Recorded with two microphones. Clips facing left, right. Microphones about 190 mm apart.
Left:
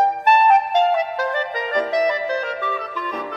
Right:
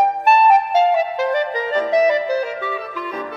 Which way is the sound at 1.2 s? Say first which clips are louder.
Right 4 dB; 10° right (ahead or behind).